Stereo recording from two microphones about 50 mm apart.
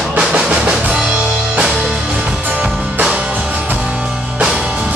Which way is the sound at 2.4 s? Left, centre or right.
Right.